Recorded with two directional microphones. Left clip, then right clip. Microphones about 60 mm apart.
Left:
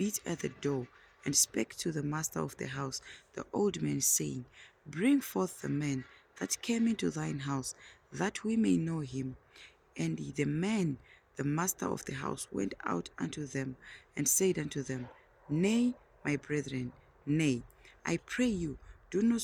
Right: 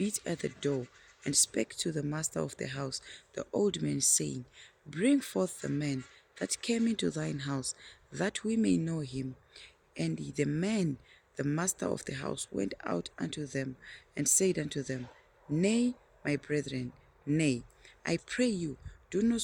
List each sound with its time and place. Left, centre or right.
0.0 s speech: right